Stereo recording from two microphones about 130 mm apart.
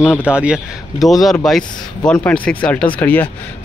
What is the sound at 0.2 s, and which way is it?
Speech, 10° right (ahead or behind).